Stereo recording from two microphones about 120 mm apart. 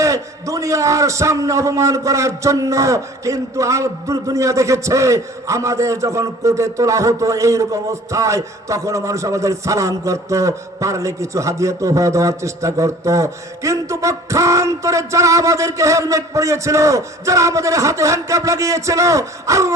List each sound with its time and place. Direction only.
0.0 s a man's voice: 25° right (ahead or behind)